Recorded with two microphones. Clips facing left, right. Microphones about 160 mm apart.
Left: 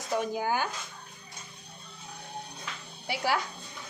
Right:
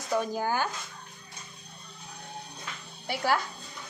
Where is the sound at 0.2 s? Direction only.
15° left (ahead or behind).